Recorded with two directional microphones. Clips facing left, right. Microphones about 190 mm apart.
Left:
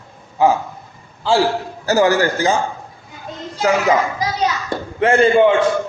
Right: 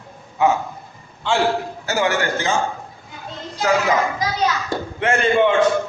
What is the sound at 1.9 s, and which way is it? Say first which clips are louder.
Speech: left 6 dB; 35° left (ahead or behind).